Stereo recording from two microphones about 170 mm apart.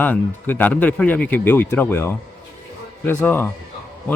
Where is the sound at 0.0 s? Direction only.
10° left (ahead or behind).